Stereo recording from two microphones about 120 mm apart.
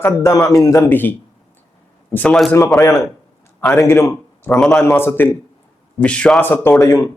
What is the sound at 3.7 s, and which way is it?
Speech, 25° left (ahead or behind).